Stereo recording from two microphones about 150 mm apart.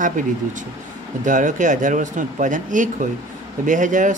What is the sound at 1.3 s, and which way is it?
Speech, 55° right (ahead or behind).